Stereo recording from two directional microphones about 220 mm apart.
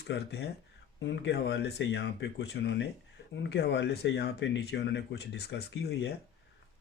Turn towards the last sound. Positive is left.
turn(degrees=50)  # may be behind; listen again after turning